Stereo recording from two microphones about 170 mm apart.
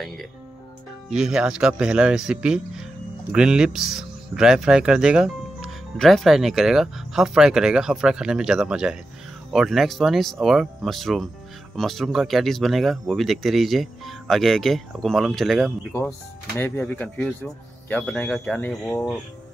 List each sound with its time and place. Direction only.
1.1 s speech: 5° right (ahead or behind)
16.5 s speech: 10° left (ahead or behind)